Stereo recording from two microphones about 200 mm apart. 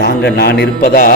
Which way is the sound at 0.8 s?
40° left (ahead or behind).